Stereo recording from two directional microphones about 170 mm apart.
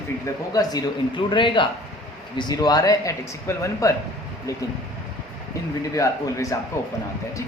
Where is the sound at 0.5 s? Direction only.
20° left (ahead or behind).